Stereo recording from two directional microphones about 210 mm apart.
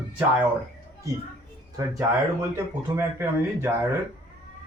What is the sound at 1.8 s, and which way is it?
Speech, 15° right (ahead or behind).